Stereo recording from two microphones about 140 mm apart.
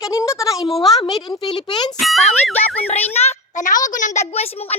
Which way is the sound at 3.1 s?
55° left (ahead or behind).